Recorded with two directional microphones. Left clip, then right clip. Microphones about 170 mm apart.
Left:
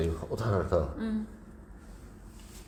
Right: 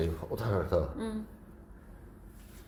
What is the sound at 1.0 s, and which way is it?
Speech, 30° right (ahead or behind).